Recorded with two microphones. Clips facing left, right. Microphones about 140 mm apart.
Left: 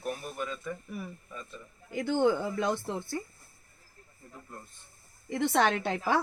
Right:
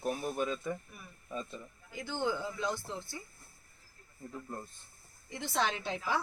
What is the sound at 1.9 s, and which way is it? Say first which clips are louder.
A woman's voice: left 9 dB; 60° left (ahead or behind).